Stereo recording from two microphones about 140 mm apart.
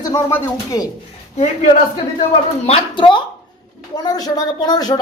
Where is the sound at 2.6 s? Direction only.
40° left (ahead or behind).